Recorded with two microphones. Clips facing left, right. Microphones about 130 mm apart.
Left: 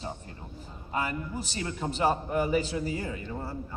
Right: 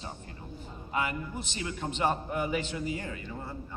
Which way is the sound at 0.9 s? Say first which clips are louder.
Left 1 dB; 40° left (ahead or behind).